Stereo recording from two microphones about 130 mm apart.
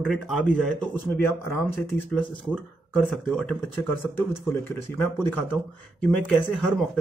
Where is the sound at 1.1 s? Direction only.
15° left (ahead or behind).